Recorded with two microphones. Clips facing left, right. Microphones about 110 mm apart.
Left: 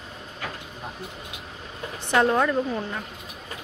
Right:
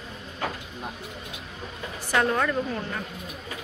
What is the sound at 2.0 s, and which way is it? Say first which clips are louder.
Speech: left 3 dB; 20° left (ahead or behind).